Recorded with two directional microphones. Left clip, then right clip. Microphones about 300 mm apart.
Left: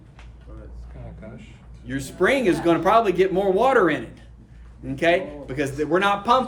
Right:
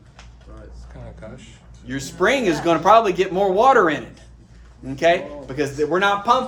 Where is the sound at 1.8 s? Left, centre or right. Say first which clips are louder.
Right 2 dB; centre.